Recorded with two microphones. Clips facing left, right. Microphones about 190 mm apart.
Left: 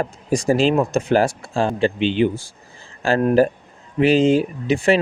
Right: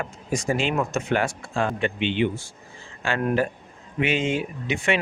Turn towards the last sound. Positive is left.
turn(degrees=35)  # may be behind; listen again after turning